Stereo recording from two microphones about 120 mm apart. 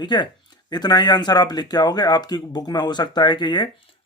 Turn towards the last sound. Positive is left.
turn(degrees=40)  # may be behind; listen again after turning